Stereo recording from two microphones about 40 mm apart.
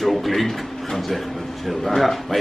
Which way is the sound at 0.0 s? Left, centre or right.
Centre.